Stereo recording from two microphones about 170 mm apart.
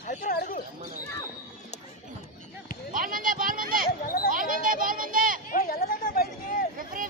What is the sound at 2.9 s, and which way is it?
Speech, 55° right (ahead or behind).